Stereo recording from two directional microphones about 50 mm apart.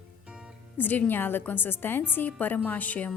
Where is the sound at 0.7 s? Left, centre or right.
Left.